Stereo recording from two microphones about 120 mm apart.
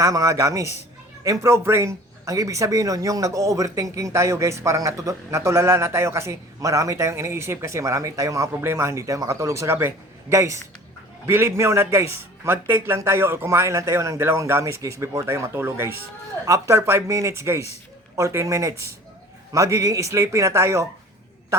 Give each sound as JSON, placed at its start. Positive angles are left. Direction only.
{"t": 0.0, "sound": "speech", "side_deg": -25}